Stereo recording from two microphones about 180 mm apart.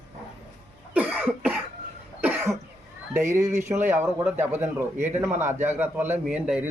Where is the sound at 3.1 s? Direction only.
15° right (ahead or behind).